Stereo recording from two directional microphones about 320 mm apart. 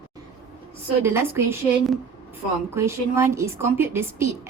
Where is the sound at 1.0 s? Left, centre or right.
Centre.